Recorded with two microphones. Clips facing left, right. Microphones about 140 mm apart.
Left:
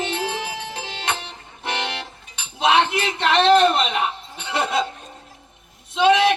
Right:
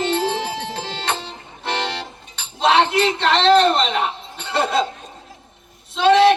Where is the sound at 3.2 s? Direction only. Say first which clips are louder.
Even; 15° left (ahead or behind).